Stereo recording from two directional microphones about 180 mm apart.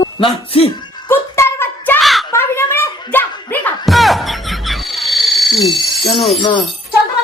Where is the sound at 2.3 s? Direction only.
15° left (ahead or behind).